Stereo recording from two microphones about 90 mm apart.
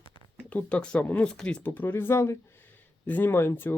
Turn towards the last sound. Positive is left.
turn(degrees=25)  # may be behind; listen again after turning